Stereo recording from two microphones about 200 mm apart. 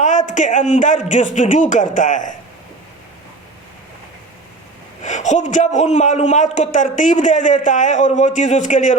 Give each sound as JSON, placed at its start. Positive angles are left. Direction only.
{"t": 0.0, "sound": "a man's voice", "side_deg": 35}
{"t": 5.0, "sound": "a man's voice", "side_deg": 35}